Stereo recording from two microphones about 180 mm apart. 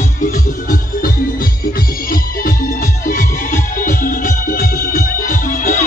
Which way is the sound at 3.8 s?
50° left (ahead or behind).